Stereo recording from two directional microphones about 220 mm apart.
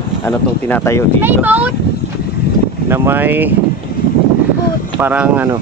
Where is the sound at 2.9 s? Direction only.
10° right (ahead or behind).